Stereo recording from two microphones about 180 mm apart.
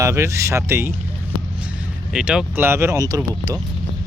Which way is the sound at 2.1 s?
5° right (ahead or behind).